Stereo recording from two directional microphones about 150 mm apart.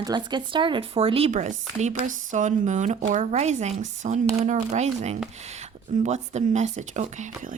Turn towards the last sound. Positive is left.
turn(degrees=-50)  # may be behind; listen again after turning